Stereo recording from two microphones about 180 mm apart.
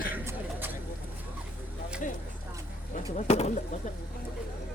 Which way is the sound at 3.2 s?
35° left (ahead or behind).